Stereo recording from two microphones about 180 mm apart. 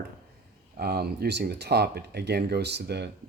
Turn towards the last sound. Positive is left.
turn(degrees=-65)  # may be behind; listen again after turning